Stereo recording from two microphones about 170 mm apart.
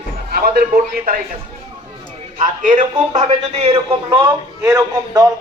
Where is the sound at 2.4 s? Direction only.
50° right (ahead or behind); by 4.3 s 30° right (ahead or behind).